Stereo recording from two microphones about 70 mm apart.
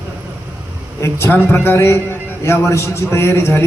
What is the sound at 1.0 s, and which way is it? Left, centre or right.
A man's voice, left.